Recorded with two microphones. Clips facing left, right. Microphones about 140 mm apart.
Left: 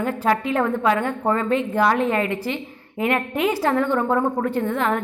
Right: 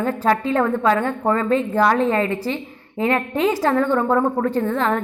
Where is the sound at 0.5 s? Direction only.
15° left (ahead or behind).